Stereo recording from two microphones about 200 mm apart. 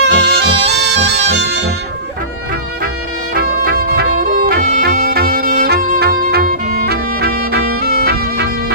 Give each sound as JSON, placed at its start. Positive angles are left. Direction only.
{"t": 0.0, "sound": "music", "side_deg": -60}
{"t": 3.3, "sound": "music", "side_deg": -50}